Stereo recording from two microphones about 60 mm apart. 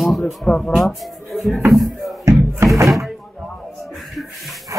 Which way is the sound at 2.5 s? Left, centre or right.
Right.